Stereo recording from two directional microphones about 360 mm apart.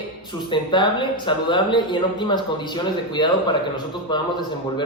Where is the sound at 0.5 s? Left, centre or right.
Centre.